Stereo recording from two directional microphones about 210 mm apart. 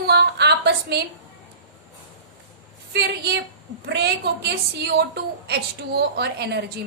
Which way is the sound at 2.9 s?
50° right (ahead or behind).